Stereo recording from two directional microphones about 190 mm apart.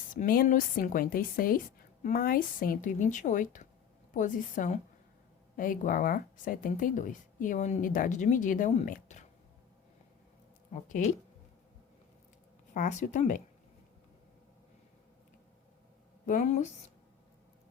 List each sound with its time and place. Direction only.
0.1 s speech: 45° left (ahead or behind)
12.7 s speech: 40° left (ahead or behind)
16.2 s speech: 40° left (ahead or behind)